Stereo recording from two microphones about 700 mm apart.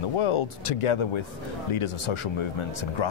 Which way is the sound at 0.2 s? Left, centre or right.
Left.